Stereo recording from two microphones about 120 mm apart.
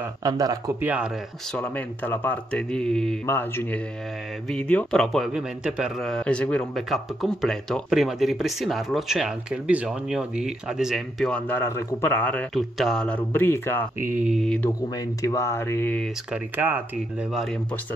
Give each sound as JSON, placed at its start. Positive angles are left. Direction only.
{"t": 0.2, "sound": "speech", "side_deg": -30}
{"t": 0.7, "sound": "speech", "side_deg": -10}
{"t": 1.5, "sound": "speech", "side_deg": 10}
{"t": 3.3, "sound": "a man's voice", "side_deg": 20}
{"t": 11.3, "sound": "speech", "side_deg": 15}
{"t": 12.5, "sound": "a man's voice", "side_deg": 0}
{"t": 13.3, "sound": "speech", "side_deg": 20}
{"t": 14.2, "sound": "a man's voice", "side_deg": 0}
{"t": 15.2, "sound": "speech", "side_deg": 25}
{"t": 16.3, "sound": "speech", "side_deg": -15}
{"t": 17.3, "sound": "a man's voice", "side_deg": 0}